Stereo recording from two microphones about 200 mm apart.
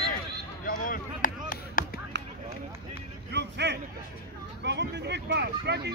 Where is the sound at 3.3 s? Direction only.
60° right (ahead or behind).